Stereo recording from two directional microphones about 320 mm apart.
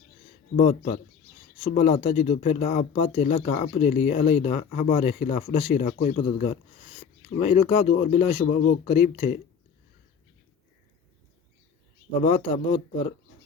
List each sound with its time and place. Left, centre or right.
0.5 s speech: left
12.2 s speech: left